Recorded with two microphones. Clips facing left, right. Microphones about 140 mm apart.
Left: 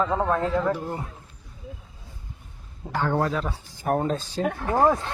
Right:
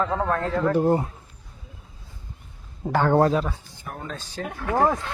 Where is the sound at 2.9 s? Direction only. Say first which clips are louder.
Right 5 dB; 60° right (ahead or behind).